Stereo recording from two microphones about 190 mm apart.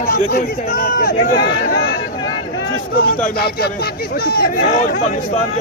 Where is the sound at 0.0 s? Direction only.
50° left (ahead or behind).